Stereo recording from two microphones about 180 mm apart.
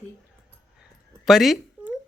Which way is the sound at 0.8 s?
Centre (ahead or behind).